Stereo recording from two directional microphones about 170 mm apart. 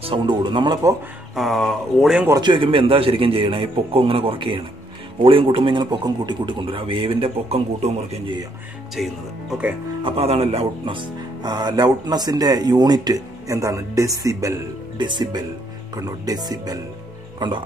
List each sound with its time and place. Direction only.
0.0 s speech: 30° right (ahead or behind)
1.3 s speech: centre (ahead or behind)
2.2 s a man's voice: 25° right (ahead or behind)
8.9 s speech: centre (ahead or behind)
10.0 s speech: 35° right (ahead or behind)